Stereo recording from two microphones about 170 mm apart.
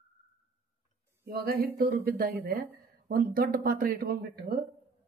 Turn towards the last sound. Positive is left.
turn(degrees=-65)  # may be behind; listen again after turning